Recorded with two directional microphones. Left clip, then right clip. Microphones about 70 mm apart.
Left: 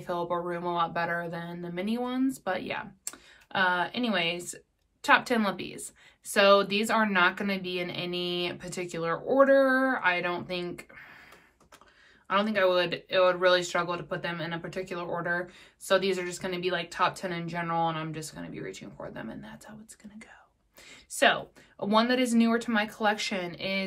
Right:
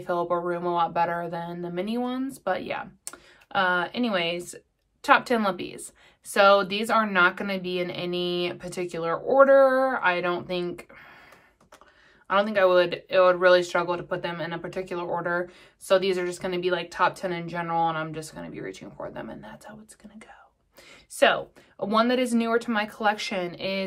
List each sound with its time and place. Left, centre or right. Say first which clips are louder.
0.0 s a woman's voice: right 5 dB; right
12.3 s a woman's voice: right 4 dB; right